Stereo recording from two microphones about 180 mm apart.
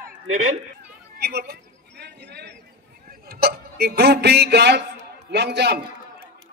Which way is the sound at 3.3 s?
60° right (ahead or behind).